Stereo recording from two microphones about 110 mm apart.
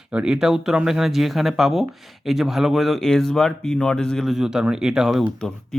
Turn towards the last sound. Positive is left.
turn(degrees=-5)  # may be behind; listen again after turning